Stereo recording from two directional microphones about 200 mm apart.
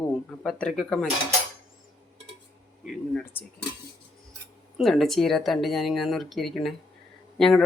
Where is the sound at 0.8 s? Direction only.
Centre (ahead or behind).